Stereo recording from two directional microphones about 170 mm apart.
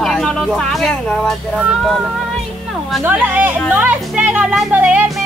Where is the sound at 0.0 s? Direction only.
5° left (ahead or behind).